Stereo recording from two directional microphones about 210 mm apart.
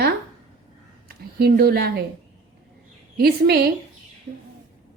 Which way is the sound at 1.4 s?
50° right (ahead or behind).